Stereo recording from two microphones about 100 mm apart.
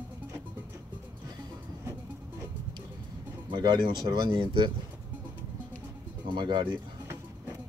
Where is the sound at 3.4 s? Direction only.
50° right (ahead or behind).